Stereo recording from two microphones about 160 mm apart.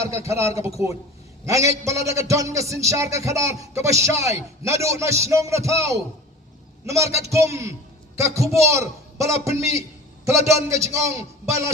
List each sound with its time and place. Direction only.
0.3 s a man's voice: 15° right (ahead or behind)